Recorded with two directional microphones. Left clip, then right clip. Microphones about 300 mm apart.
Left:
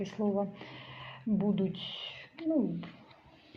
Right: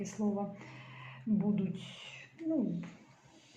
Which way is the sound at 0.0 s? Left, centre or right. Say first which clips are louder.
Left 5 dB; left.